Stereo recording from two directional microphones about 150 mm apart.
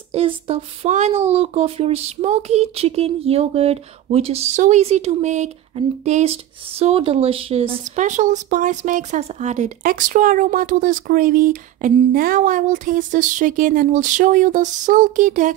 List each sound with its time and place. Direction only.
0.1 s speech: 40° right (ahead or behind)
7.8 s speech: 55° right (ahead or behind)